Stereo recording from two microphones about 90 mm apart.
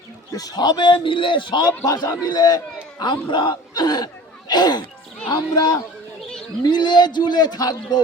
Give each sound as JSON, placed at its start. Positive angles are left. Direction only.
{"t": 0.3, "sound": "speech", "side_deg": 45}
{"t": 1.8, "sound": "a man's voice", "side_deg": 45}